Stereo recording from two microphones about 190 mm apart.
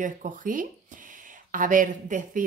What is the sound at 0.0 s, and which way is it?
Speech, 45° right (ahead or behind).